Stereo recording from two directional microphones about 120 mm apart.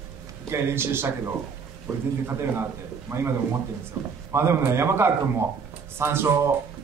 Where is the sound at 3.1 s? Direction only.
20° right (ahead or behind).